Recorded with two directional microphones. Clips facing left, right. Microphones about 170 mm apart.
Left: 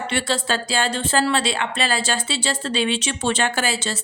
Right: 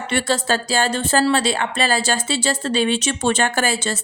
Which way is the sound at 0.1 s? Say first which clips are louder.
Right 4 dB; 45° right (ahead or behind).